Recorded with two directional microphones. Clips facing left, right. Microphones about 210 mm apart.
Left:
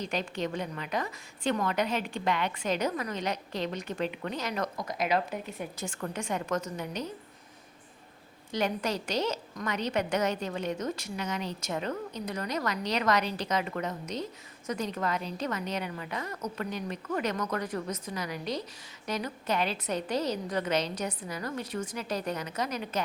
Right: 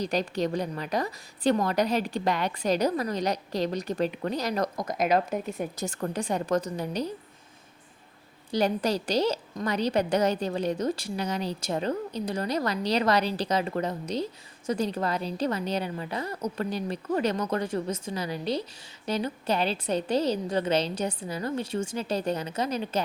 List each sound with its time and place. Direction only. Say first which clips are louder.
0.0 s a woman's voice: right 5 dB; 40° right (ahead or behind)
8.5 s a woman's voice: right 5 dB; 35° right (ahead or behind)